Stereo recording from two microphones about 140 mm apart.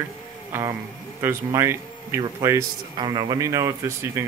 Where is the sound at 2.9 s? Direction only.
35° right (ahead or behind).